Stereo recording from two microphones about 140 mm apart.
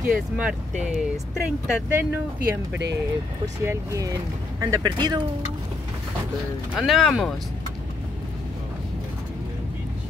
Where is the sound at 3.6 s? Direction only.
25° right (ahead or behind).